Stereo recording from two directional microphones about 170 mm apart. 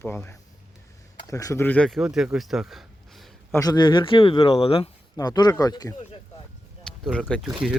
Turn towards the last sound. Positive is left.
turn(degrees=0)  # may be behind; listen again after turning